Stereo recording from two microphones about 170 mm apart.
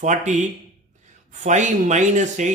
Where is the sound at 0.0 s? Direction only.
45° right (ahead or behind).